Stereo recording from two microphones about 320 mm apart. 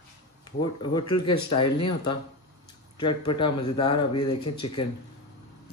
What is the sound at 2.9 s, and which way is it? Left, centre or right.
Speech, centre.